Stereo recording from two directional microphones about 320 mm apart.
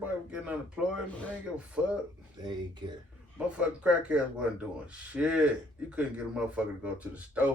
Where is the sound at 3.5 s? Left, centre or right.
Centre.